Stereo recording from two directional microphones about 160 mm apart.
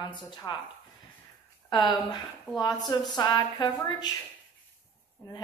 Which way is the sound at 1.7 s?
25° left (ahead or behind).